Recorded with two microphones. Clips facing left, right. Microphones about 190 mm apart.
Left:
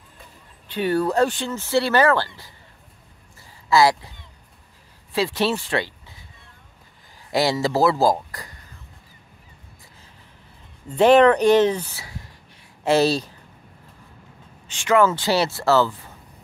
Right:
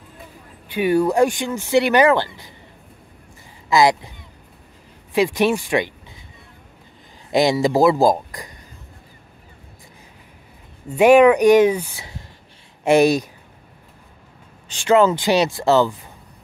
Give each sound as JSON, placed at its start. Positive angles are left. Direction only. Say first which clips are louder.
{"t": 0.7, "sound": "speech", "louder": "right 4 dB", "side_deg": -10}
{"t": 3.7, "sound": "speech", "louder": "right 1 dB", "side_deg": -20}
{"t": 5.1, "sound": "speech", "louder": "right 4 dB", "side_deg": -15}
{"t": 7.2, "sound": "speech", "louder": "right 4 dB", "side_deg": -20}
{"t": 10.9, "sound": "speech", "louder": "right 3 dB", "side_deg": -10}
{"t": 14.7, "sound": "speech", "louder": "right 4 dB", "side_deg": -35}
{"t": 15.0, "sound": "speech", "louder": "right 2 dB", "side_deg": -15}